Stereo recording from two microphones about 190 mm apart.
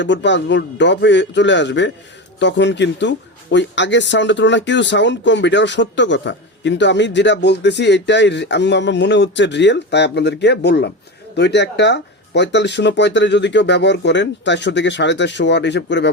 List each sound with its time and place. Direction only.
0.0 s speech: 70° left (ahead or behind)